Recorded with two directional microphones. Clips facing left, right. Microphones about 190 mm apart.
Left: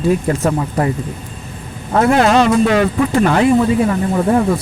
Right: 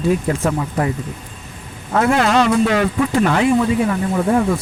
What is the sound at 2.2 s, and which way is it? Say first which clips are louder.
Speech: left 3 dB; 45° left (ahead or behind).